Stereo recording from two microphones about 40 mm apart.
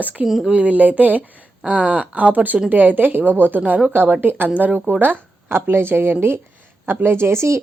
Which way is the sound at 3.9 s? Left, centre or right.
Right.